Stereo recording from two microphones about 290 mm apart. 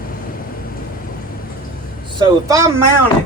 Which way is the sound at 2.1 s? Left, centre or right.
Centre.